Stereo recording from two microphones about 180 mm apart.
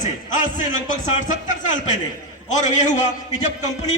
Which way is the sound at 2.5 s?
40° left (ahead or behind).